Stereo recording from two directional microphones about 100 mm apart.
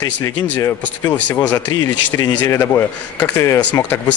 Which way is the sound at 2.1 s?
30° left (ahead or behind).